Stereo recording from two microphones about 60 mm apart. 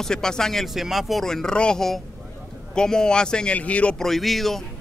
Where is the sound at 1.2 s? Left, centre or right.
Centre.